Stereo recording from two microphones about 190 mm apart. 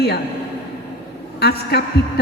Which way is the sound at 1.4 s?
60° left (ahead or behind).